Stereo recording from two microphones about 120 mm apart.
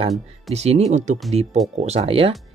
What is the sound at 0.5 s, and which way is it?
Speech, 65° right (ahead or behind).